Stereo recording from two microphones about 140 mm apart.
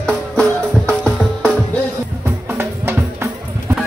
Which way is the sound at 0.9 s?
10° left (ahead or behind).